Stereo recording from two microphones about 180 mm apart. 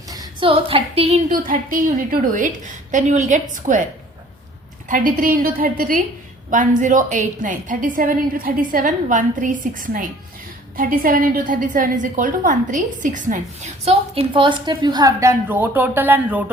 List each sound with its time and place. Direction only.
0.1 s a woman's voice: 25° right (ahead or behind)
1.3 s a woman's voice: 50° right (ahead or behind)
4.9 s a woman's voice: 50° right (ahead or behind); by 16.5 s 10° right (ahead or behind)